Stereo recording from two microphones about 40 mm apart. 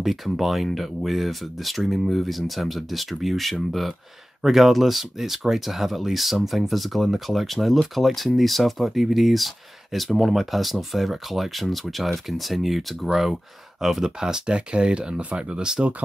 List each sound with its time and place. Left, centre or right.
0.0 s speech: centre
14.2 s speech: right